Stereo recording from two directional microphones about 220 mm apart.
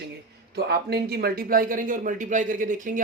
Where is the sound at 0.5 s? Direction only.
45° right (ahead or behind).